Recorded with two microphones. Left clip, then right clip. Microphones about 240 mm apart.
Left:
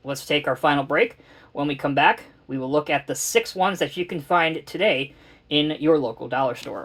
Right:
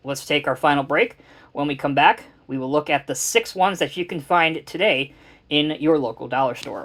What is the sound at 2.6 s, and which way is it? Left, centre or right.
Speech, right.